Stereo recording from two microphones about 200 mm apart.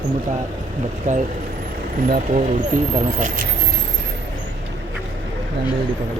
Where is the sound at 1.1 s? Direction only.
35° right (ahead or behind).